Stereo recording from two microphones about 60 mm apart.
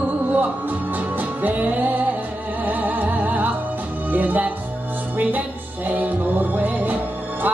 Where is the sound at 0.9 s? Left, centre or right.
Right.